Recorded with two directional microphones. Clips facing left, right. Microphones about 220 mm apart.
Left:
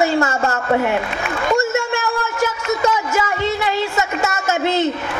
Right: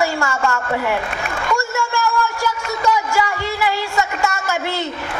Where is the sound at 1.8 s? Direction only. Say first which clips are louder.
Right 1 dB; 20° left (ahead or behind).